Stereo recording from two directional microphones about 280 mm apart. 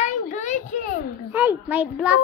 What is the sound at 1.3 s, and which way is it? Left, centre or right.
Speech, centre.